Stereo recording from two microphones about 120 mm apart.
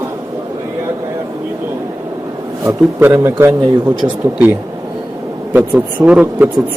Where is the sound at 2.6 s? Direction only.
15° right (ahead or behind).